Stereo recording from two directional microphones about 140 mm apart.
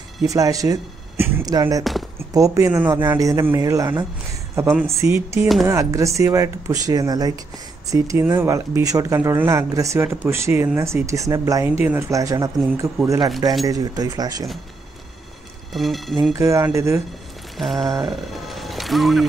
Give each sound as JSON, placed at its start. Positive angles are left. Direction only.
{"t": 0.3, "sound": "speech", "side_deg": -25}
{"t": 1.4, "sound": "speech", "side_deg": -25}
{"t": 11.6, "sound": "speech", "side_deg": -15}
{"t": 15.7, "sound": "speech", "side_deg": 0}
{"t": 16.3, "sound": "speech", "side_deg": -20}
{"t": 17.6, "sound": "speech", "side_deg": 0}